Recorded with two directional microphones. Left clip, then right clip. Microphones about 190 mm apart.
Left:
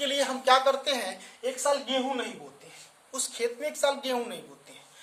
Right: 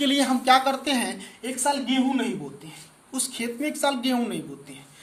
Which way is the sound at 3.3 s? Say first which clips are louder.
Even; 20° left (ahead or behind).